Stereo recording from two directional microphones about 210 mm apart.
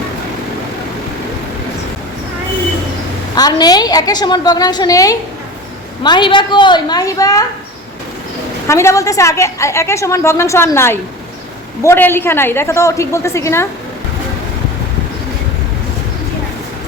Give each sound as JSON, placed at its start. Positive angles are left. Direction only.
{"t": 3.3, "sound": "a woman's voice", "side_deg": 20}
{"t": 8.6, "sound": "a woman's voice", "side_deg": 15}